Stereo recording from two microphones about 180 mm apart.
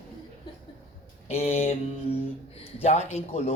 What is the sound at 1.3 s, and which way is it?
Speech, 35° left (ahead or behind).